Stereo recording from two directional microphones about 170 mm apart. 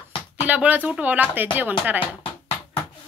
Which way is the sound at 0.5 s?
10° right (ahead or behind).